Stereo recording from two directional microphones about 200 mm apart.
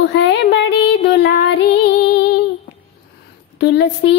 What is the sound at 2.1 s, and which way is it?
Female singing, 55° left (ahead or behind).